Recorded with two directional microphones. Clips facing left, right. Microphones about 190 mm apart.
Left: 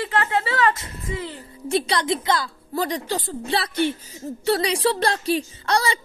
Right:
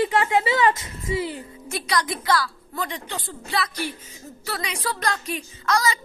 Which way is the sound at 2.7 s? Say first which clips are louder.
Left 9 dB; 35° left (ahead or behind).